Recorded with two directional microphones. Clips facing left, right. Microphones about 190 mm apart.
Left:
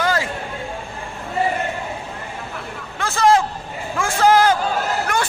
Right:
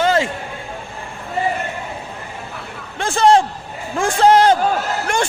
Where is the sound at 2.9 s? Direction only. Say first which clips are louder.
Right 3 dB; 30° right (ahead or behind).